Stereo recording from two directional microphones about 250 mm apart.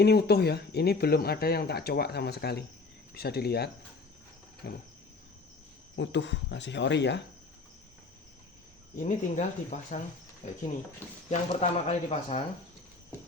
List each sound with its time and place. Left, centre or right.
0.0 s speech: left
6.0 s speech: left
9.0 s speech: left